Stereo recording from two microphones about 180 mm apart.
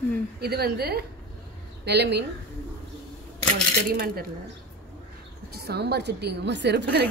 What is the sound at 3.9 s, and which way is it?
Speech, 60° right (ahead or behind).